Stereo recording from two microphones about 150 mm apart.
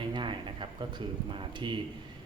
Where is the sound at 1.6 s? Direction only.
30° right (ahead or behind).